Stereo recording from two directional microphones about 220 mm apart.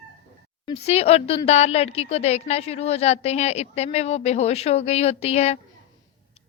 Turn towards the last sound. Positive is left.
turn(degrees=30)  # may be behind; listen again after turning